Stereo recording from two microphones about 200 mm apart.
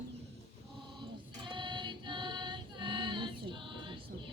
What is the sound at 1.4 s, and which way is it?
Female singing, 25° right (ahead or behind).